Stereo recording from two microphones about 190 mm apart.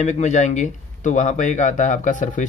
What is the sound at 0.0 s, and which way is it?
Speech, 35° left (ahead or behind).